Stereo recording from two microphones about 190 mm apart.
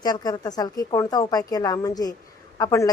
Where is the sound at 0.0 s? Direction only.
20° left (ahead or behind).